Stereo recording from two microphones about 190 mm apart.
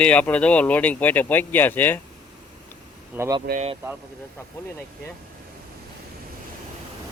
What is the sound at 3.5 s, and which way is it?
Speech, 35° right (ahead or behind).